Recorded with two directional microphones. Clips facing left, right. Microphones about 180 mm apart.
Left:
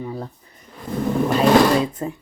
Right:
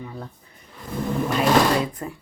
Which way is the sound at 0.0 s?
40° left (ahead or behind).